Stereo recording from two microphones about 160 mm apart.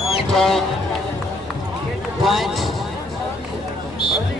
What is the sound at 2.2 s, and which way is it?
Speech, centre (ahead or behind).